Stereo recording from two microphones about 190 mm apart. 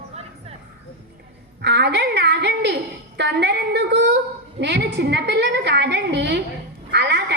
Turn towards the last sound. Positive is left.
turn(degrees=-65)  # may be behind; listen again after turning